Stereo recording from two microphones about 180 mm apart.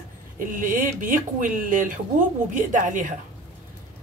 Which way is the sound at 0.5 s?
50° right (ahead or behind).